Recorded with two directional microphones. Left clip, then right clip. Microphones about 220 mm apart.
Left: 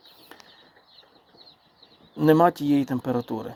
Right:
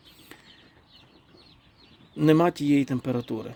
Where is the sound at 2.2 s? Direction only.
25° right (ahead or behind).